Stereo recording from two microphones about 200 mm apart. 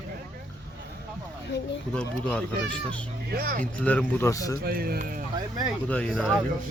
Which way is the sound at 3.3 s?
45° right (ahead or behind).